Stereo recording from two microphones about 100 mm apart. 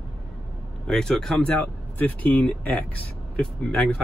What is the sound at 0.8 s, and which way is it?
Speech, 5° left (ahead or behind).